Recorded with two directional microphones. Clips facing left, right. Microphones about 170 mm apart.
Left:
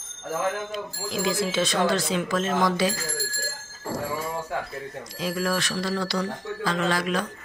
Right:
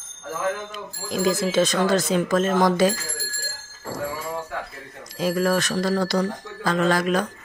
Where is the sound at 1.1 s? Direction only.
45° right (ahead or behind).